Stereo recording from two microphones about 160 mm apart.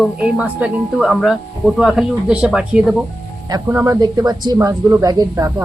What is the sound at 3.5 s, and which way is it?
Speech, 20° right (ahead or behind).